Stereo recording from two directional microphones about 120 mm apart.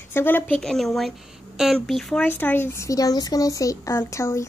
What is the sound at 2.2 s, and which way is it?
Speech, 15° left (ahead or behind).